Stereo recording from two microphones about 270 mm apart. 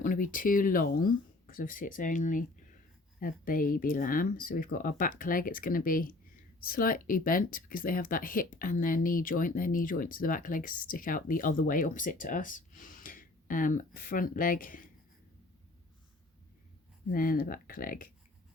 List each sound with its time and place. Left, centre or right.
0.0 s speech: left
17.1 s speech: left